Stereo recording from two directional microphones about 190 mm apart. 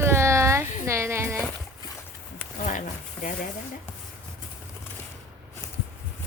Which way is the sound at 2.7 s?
45° left (ahead or behind).